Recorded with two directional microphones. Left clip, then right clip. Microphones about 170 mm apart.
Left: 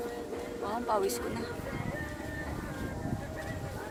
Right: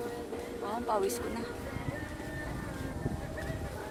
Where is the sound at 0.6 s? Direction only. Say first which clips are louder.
Left 1 dB; 10° left (ahead or behind).